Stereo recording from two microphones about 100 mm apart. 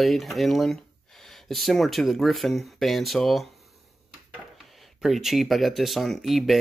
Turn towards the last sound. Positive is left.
turn(degrees=0)  # may be behind; listen again after turning